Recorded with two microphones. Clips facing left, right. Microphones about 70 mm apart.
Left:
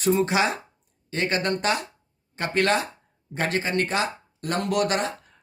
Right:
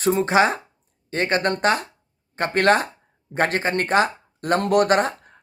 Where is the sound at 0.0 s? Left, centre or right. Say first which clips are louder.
Right 4 dB; right.